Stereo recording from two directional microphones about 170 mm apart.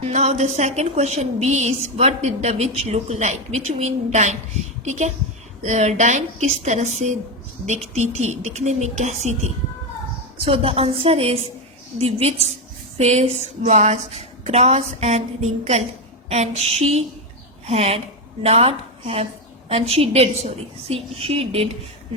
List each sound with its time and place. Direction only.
0.0 s a woman's voice: 40° right (ahead or behind)
10.4 s a woman's voice: 35° right (ahead or behind)